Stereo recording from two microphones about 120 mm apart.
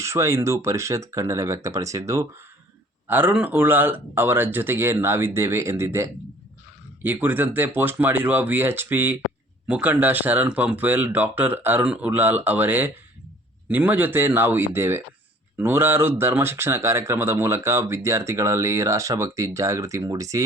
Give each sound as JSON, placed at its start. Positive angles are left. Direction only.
{"t": 0.0, "sound": "speech", "side_deg": -25}
{"t": 3.1, "sound": "speech", "side_deg": -15}